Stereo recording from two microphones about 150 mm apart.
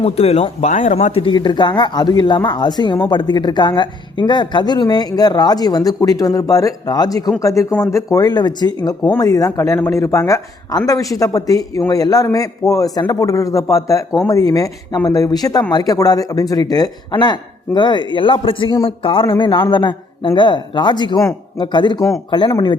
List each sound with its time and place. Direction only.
0.0 s speech: 45° left (ahead or behind)